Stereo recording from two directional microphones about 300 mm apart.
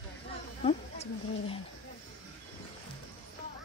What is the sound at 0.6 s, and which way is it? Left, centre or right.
Speech, centre.